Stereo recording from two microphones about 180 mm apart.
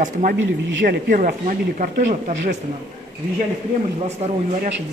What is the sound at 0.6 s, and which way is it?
Speech, 80° right.